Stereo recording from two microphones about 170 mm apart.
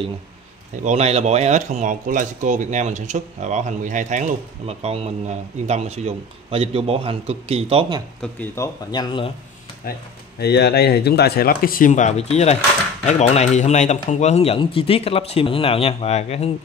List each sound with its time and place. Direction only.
0.8 s speech: 40° right (ahead or behind)
8.2 s speech: 10° left (ahead or behind)
8.9 s speech: 25° left (ahead or behind)
9.8 s speech: 60° left (ahead or behind)
10.4 s speech: 75° left (ahead or behind); by 16.5 s 40° left (ahead or behind)